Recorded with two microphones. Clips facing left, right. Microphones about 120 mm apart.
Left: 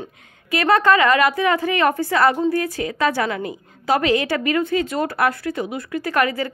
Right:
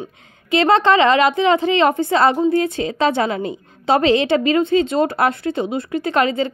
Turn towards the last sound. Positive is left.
turn(degrees=-25)  # may be behind; listen again after turning